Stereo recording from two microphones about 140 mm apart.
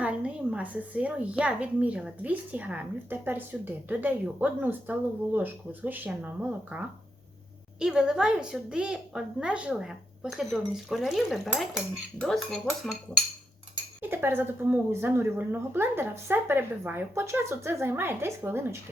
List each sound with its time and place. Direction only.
0.0 s a woman's voice: 10° right (ahead or behind)
14.0 s a woman's voice: 15° right (ahead or behind)